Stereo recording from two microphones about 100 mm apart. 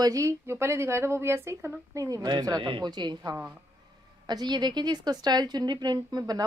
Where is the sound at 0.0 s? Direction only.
35° right (ahead or behind).